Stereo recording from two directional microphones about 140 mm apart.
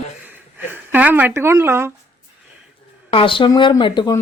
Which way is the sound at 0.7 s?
10° right (ahead or behind).